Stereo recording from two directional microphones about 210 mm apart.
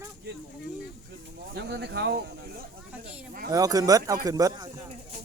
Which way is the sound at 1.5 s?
55° right (ahead or behind).